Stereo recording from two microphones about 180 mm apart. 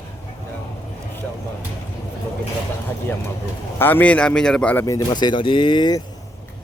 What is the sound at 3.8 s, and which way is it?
A man's voice, 10° left (ahead or behind).